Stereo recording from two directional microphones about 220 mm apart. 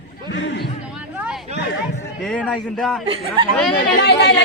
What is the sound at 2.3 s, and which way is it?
Speech, centre (ahead or behind).